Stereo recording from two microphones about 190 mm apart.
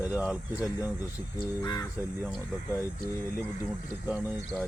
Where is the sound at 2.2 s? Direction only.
10° right (ahead or behind).